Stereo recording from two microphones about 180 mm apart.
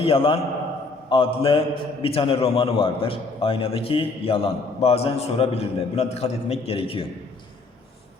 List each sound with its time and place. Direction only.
0.0 s a man's voice: 30° left (ahead or behind)